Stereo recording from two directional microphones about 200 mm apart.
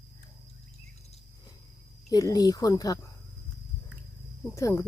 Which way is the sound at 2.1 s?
20° left (ahead or behind).